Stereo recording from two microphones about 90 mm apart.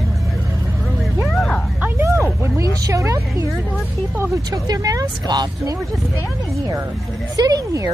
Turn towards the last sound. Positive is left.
turn(degrees=-40)  # may be behind; listen again after turning